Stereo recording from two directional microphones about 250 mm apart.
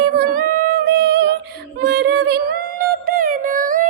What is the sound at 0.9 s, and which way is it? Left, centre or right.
Music, right.